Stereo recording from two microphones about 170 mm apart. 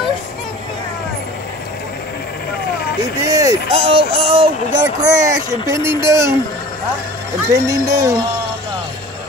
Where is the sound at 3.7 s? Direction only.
35° right (ahead or behind).